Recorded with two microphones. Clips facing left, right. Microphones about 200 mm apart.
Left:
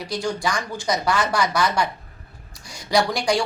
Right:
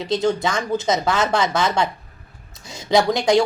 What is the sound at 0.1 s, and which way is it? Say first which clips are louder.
A woman's voice: right 5 dB; 25° right (ahead or behind).